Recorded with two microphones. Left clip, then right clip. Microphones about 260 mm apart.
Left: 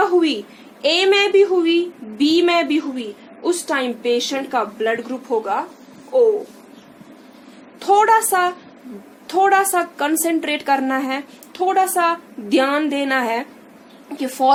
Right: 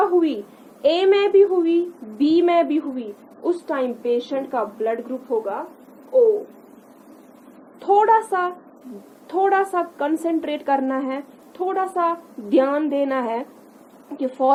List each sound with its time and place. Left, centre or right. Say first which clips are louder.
0.8 s a woman's voice: left 1 dB; centre
7.8 s a woman's voice: left 2 dB; centre